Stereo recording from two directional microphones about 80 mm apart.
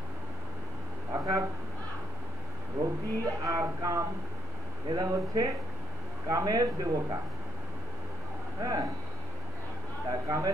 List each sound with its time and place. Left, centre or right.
1.1 s a sound: right
2.8 s speech: right
4.9 s speech: right
8.5 s speech: right
10.0 s speech: right